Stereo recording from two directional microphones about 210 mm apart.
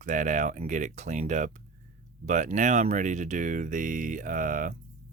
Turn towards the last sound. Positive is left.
turn(degrees=-40)  # may be behind; listen again after turning